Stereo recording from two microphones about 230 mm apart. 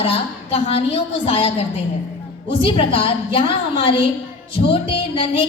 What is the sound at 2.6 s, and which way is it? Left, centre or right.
A woman's voice, left.